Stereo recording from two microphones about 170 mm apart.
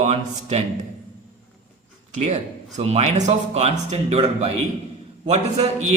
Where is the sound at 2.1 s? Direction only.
45° right (ahead or behind).